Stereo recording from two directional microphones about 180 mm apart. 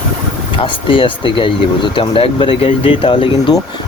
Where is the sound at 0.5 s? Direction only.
25° left (ahead or behind).